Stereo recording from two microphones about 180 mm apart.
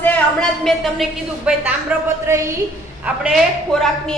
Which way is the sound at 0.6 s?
Centre (ahead or behind).